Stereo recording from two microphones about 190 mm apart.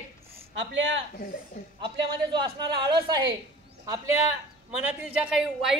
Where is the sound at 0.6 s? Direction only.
75° right (ahead or behind).